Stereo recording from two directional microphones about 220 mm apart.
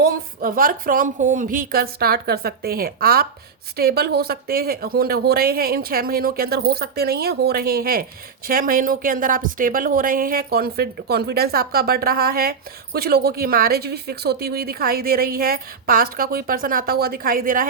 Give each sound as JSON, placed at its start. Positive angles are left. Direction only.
{"t": 0.0, "sound": "speech", "side_deg": -40}